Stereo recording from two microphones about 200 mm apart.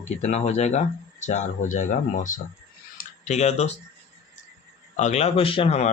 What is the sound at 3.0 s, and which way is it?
Tick-tock, 35° left (ahead or behind).